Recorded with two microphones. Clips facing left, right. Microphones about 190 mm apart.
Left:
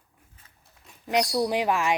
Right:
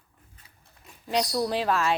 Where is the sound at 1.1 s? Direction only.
15° left (ahead or behind).